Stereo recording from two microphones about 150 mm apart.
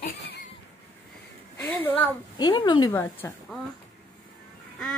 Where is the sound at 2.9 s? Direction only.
15° left (ahead or behind).